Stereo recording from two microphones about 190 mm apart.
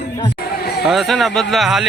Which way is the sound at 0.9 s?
Centre (ahead or behind).